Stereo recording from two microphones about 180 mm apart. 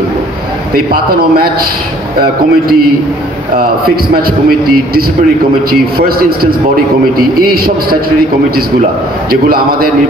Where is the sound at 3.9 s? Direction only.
55° right (ahead or behind).